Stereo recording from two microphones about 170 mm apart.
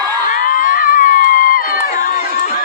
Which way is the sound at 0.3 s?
55° left (ahead or behind).